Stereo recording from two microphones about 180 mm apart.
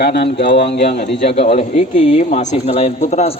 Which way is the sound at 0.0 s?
65° left (ahead or behind).